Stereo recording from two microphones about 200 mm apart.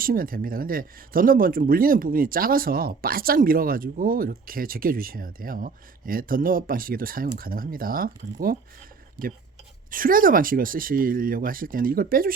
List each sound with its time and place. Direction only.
0.0 s speech: 45° right (ahead or behind)
9.9 s speech: 45° right (ahead or behind)